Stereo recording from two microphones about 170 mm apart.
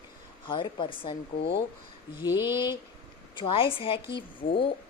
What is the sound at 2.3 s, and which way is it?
Speech, 15° right (ahead or behind).